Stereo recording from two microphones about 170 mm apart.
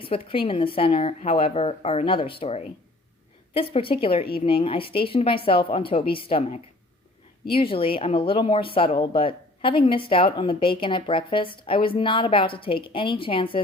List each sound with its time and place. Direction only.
0.0 s speech: 30° left (ahead or behind)